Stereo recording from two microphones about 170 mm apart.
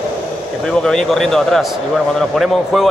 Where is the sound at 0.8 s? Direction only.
5° left (ahead or behind).